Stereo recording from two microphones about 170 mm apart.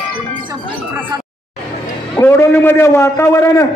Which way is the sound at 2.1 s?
10° left (ahead or behind).